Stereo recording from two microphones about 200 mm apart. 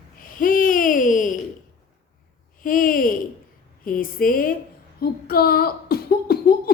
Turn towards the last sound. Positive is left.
turn(degrees=50)  # may be behind; listen again after turning